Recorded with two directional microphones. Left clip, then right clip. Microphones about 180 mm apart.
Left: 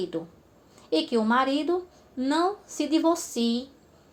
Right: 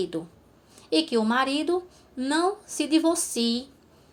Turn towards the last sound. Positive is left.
turn(degrees=-30)  # may be behind; listen again after turning